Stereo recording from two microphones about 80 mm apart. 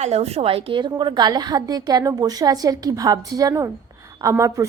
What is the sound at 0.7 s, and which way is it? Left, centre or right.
A woman's voice, right.